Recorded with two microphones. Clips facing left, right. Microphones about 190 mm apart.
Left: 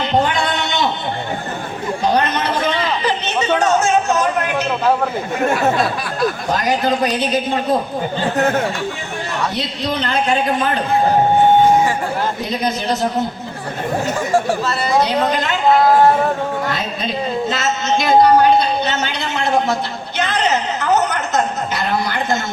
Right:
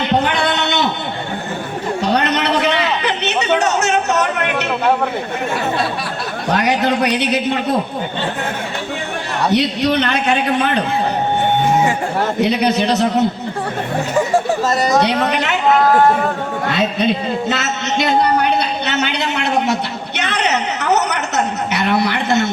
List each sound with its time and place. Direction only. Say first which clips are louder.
0.3 s a sound: right 2 dB; 70° right (ahead or behind)
2.0 s a sound: even; 70° right (ahead or behind)
3.6 s music: left 1 dB; 70° right (ahead or behind)
6.5 s a man's voice: right 5 dB; 70° right (ahead or behind)
9.5 s a man's voice: right 7 dB; 70° right (ahead or behind)
12.2 s a man's voice: right 5 dB; 70° right (ahead or behind)
14.6 s speech: right 4 dB; 45° right (ahead or behind)
15.0 s a man's voice: right 1 dB; 70° right (ahead or behind)
16.6 s a man's voice: right 5 dB; 70° right (ahead or behind)
17.5 s a sound: left 1 dB; 65° right (ahead or behind)